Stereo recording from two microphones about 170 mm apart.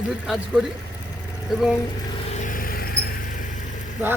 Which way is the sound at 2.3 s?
50° left (ahead or behind).